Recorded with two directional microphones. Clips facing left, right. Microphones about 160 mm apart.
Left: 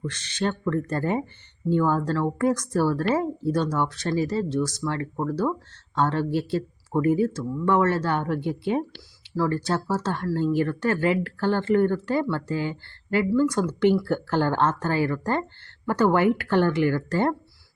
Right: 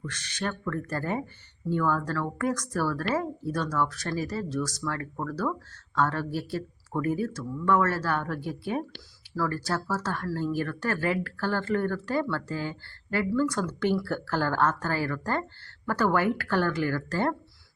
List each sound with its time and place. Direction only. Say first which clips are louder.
0.0 s a woman's voice: left 6 dB; 25° left (ahead or behind)